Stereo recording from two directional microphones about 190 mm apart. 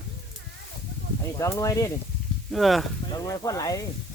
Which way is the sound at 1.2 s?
15° left (ahead or behind).